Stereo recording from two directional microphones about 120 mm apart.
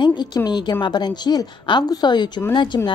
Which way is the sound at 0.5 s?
35° left (ahead or behind).